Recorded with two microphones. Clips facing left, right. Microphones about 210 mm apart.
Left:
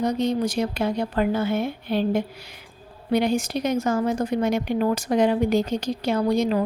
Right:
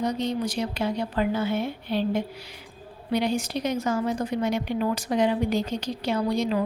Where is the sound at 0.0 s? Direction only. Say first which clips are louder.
Left 4 dB; 45° left (ahead or behind).